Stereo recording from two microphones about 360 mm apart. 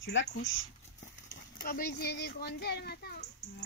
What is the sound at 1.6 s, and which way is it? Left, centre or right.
A child's voice, left.